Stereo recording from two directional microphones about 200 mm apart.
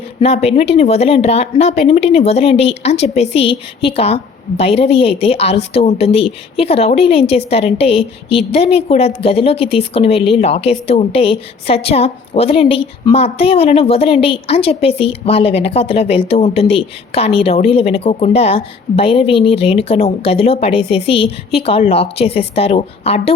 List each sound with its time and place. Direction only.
0.2 s a woman's voice: 30° left (ahead or behind)